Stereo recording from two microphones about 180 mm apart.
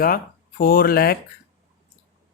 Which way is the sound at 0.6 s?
55° left (ahead or behind).